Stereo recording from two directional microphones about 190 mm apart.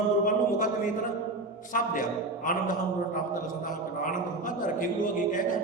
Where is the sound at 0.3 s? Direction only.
45° left (ahead or behind).